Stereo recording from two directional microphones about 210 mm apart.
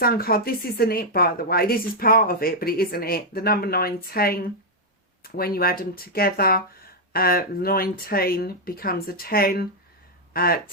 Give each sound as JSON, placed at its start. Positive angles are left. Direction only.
{"t": 0.0, "sound": "speech", "side_deg": 45}